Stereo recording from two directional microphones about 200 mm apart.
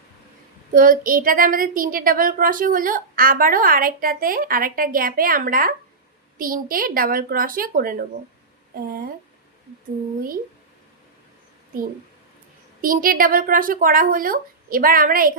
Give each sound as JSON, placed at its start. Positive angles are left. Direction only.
{"t": 0.7, "sound": "a woman's voice", "side_deg": -45}
{"t": 12.8, "sound": "a woman's voice", "side_deg": -45}